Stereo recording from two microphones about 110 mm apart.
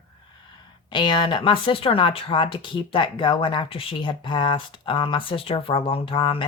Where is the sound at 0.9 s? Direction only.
45° left (ahead or behind).